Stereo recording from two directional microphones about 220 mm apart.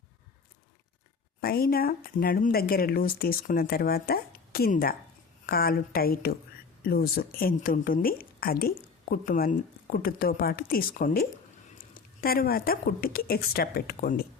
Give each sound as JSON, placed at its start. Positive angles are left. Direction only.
{"t": 1.4, "sound": "speech", "side_deg": 45}